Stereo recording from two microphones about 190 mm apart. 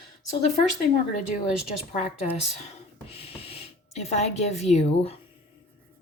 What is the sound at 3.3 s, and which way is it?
Speech, 30° left (ahead or behind).